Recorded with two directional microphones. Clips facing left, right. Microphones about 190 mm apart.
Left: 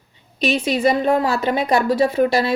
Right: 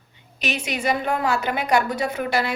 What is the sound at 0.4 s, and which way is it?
A woman's voice, 35° left (ahead or behind).